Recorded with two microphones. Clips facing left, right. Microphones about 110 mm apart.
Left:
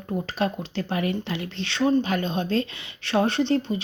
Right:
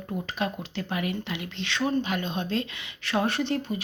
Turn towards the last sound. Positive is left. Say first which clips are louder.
# left 5 dB
turn(degrees=30)  # may be behind; listen again after turning